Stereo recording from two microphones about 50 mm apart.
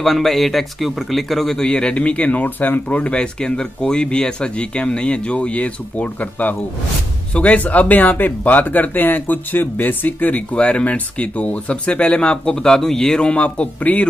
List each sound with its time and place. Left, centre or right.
0.0 s speech: centre; by 14.0 s left